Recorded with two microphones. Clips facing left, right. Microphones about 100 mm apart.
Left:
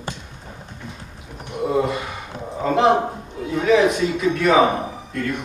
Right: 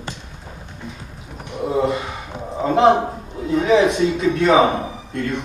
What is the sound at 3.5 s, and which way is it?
Speech, 25° right (ahead or behind).